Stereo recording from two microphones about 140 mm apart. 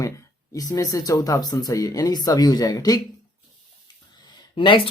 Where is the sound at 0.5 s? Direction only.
25° left (ahead or behind).